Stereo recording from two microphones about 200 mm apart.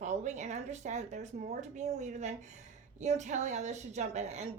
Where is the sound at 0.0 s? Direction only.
35° right (ahead or behind).